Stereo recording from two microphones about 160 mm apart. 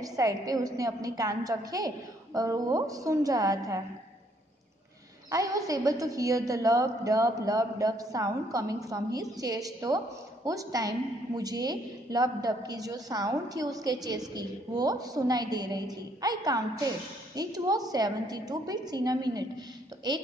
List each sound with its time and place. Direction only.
0.0 s a woman's voice: 20° right (ahead or behind)
5.3 s a woman's voice: 20° right (ahead or behind)